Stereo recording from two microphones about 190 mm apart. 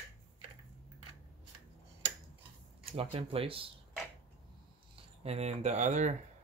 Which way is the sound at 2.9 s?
30° right (ahead or behind).